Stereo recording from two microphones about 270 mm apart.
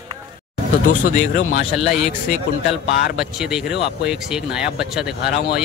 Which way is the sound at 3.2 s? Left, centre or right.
Centre.